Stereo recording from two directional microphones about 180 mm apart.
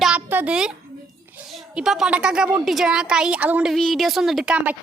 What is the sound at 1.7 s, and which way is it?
A woman's voice, 5° right (ahead or behind).